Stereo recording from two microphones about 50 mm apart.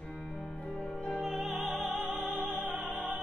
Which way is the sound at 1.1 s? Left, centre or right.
Centre.